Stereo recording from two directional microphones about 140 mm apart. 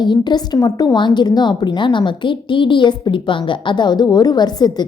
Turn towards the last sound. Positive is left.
turn(degrees=30)  # may be behind; listen again after turning